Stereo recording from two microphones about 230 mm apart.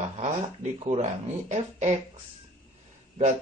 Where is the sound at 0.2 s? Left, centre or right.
Right.